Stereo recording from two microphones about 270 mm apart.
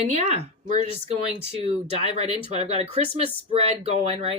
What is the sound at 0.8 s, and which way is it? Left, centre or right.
Speech, left.